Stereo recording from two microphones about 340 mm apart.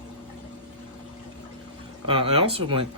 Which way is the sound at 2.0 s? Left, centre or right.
Centre.